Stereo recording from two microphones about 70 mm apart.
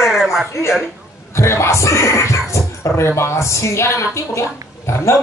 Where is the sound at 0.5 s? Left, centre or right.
Left.